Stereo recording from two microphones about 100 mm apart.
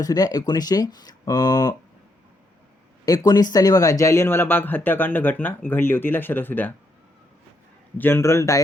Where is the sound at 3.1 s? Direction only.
40° left (ahead or behind); by 6.7 s 20° left (ahead or behind).